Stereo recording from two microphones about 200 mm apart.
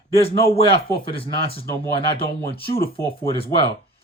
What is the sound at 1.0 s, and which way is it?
Speech, 30° left (ahead or behind).